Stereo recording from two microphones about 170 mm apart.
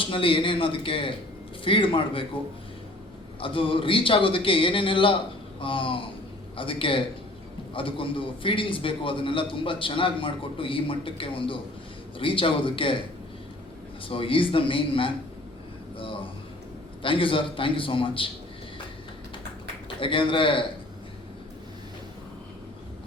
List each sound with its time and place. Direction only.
0.0 s a man's voice: 30° left (ahead or behind)
3.4 s a man's voice: 30° left (ahead or behind)
14.1 s a man's voice: 30° left (ahead or behind)
16.0 s a sound: 30° left (ahead or behind)
17.0 s a man's voice: 30° left (ahead or behind)
20.0 s a man's voice: 30° left (ahead or behind)